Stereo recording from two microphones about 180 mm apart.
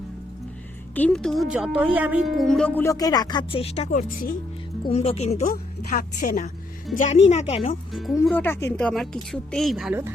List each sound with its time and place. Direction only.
0.9 s a woman's voice: 5° left (ahead or behind); by 5.4 s 35° left (ahead or behind)
5.5 s speech: 55° left (ahead or behind); by 7.8 s 35° left (ahead or behind)
8.2 s a woman's voice: 10° left (ahead or behind)